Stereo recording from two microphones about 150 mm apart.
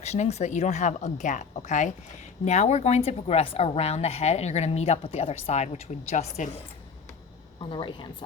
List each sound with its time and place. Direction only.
0.0 s a woman's voice: 45° left (ahead or behind)
7.6 s a woman's voice: 35° left (ahead or behind)